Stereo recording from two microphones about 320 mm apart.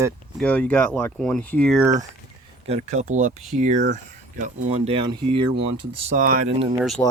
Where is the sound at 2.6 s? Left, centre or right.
Right.